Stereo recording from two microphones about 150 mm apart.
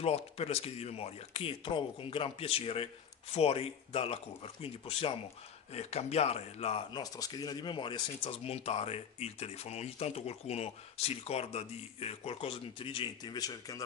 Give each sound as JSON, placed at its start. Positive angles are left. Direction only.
{"t": 0.0, "sound": "speech", "side_deg": 45}
{"t": 6.9, "sound": "speech", "side_deg": 25}